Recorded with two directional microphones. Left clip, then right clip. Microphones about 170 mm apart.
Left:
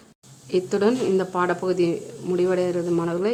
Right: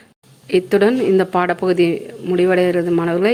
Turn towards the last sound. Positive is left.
turn(degrees=-20)  # may be behind; listen again after turning